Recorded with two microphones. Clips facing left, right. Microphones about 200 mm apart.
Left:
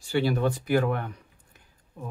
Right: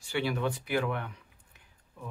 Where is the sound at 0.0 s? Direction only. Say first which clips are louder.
Left 6 dB; 35° left (ahead or behind).